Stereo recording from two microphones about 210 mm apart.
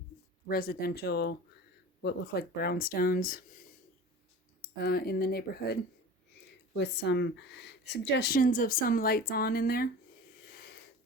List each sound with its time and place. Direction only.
0.4 s speech: 45° left (ahead or behind)
4.8 s speech: 45° left (ahead or behind)
6.7 s speech: 55° left (ahead or behind)